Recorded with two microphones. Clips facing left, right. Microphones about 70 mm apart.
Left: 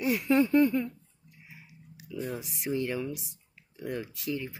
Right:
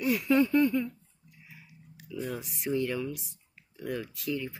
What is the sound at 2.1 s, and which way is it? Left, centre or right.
Speech, centre.